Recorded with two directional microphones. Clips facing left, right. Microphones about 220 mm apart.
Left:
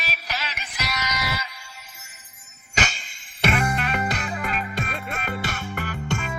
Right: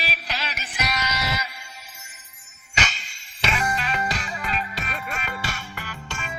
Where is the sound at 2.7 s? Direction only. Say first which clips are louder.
Left 2 dB; 45° left (ahead or behind).